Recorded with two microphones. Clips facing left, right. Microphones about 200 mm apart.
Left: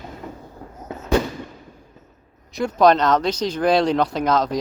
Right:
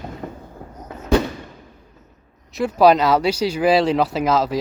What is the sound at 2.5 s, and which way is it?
Speech, 5° right (ahead or behind).